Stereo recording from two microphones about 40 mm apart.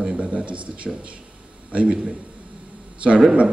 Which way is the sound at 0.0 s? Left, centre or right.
Right.